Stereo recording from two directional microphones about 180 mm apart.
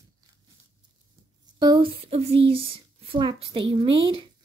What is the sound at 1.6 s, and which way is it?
Speech, 25° right (ahead or behind).